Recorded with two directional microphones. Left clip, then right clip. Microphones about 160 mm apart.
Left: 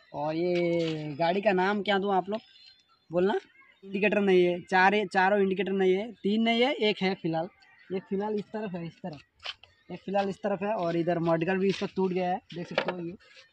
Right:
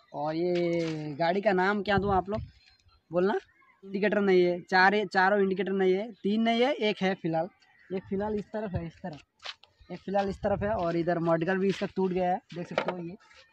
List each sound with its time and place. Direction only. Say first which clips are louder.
0.1 s speech: left 1 dB; 15° left (ahead or behind); by 8.0 s 5° right (ahead or behind)
8.1 s speech: even; 10° left (ahead or behind)
10.3 s speech: right 1 dB; 15° left (ahead or behind); by 13.1 s 5° right (ahead or behind)